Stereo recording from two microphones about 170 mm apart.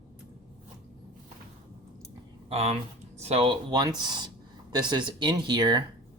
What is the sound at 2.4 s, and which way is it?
Speech, 35° right (ahead or behind).